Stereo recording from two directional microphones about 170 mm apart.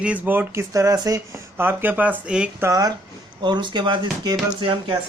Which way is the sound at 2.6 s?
20° right (ahead or behind).